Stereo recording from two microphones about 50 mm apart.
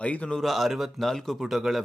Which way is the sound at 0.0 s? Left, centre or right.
Left.